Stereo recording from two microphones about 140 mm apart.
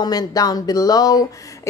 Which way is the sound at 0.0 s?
30° left (ahead or behind).